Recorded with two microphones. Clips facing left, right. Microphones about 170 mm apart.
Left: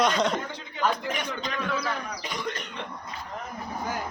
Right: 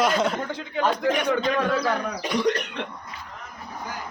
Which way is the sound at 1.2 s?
65° right (ahead or behind).